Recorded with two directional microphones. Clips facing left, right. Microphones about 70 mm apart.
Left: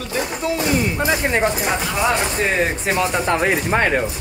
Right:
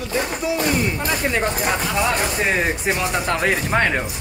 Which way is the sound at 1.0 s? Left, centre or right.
Left.